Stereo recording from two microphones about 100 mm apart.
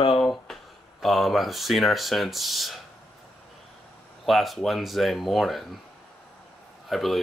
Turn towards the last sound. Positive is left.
turn(degrees=0)  # may be behind; listen again after turning